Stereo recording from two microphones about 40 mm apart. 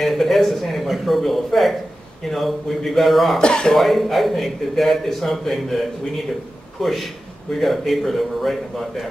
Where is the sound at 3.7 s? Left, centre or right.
Centre.